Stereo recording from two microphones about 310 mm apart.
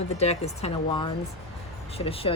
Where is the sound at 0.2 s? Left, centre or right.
Centre.